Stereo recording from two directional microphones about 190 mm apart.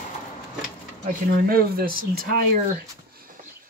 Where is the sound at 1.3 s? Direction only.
55° right (ahead or behind).